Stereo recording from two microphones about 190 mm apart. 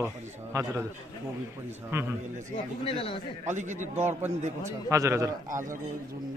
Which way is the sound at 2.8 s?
30° left (ahead or behind).